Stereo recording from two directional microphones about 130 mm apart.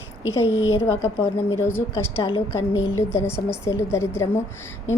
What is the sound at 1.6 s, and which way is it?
A woman's voice, 20° left (ahead or behind).